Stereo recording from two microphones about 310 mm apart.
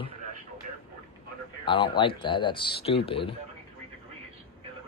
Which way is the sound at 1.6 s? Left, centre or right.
Centre.